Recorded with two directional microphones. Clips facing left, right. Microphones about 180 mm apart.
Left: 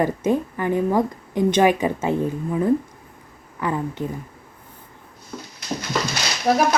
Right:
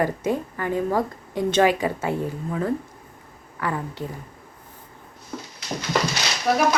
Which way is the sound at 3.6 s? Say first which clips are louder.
Left 3 dB; 20° left (ahead or behind).